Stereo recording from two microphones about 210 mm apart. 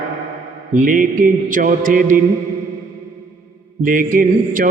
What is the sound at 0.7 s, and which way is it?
Mantra, 40° right (ahead or behind).